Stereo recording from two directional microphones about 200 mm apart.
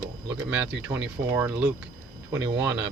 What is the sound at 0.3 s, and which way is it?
Speech, 5° right (ahead or behind).